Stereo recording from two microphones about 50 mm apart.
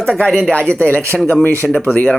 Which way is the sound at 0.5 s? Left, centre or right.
Left.